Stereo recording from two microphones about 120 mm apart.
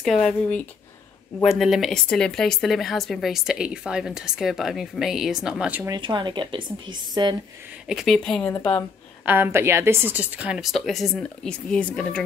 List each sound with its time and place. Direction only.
0.0 s speech: 5° left (ahead or behind)
5.9 s speech: 40° right (ahead or behind)
7.9 s a woman's voice: centre (ahead or behind)
9.2 s a woman's voice: 15° right (ahead or behind); by 12.2 s 10° left (ahead or behind)